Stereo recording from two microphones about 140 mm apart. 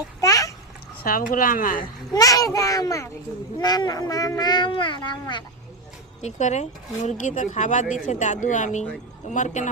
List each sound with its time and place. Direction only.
0.2 s babbling: 25° left (ahead or behind)
1.0 s a woman's voice: 85° left
1.8 s speech: 25° left (ahead or behind)
6.2 s speech: 55° left (ahead or behind)